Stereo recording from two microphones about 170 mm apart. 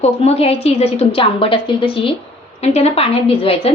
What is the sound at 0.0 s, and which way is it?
A woman's voice, 35° left (ahead or behind).